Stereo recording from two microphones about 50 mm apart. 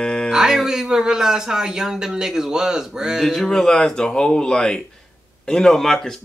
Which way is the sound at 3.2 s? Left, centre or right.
Centre.